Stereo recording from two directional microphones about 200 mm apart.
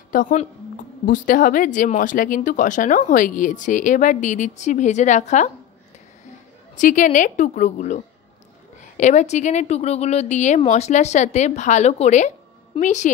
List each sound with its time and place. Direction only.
0.1 s speech: 40° left (ahead or behind)
6.8 s speech: 40° left (ahead or behind)